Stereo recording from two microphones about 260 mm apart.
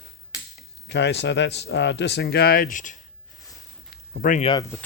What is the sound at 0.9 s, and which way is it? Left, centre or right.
Speech, left.